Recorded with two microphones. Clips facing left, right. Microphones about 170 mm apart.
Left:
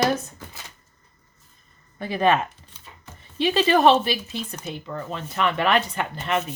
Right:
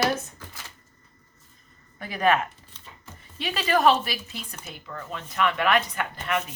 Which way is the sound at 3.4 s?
25° left (ahead or behind).